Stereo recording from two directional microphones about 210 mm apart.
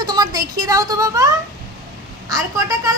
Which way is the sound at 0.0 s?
20° right (ahead or behind).